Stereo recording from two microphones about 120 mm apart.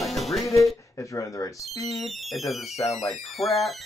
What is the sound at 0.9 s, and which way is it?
Speech, 25° left (ahead or behind).